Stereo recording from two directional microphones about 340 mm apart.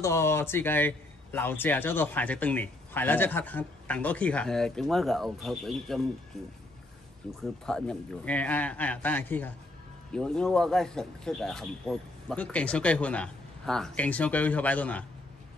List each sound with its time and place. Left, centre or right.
0.0 s a man's voice: centre
7.2 s a man's voice: centre